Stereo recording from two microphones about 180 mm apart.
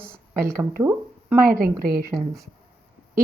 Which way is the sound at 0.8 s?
15° right (ahead or behind).